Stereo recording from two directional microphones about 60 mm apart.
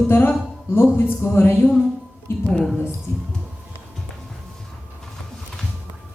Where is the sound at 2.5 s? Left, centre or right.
Centre.